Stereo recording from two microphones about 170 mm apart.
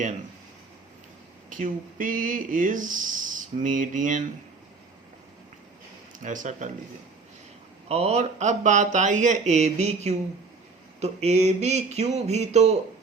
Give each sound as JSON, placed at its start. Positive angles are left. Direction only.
{"t": 1.5, "sound": "speech", "side_deg": -50}
{"t": 6.1, "sound": "speech", "side_deg": -50}
{"t": 7.9, "sound": "speech", "side_deg": -40}
{"t": 11.0, "sound": "a sound", "side_deg": -40}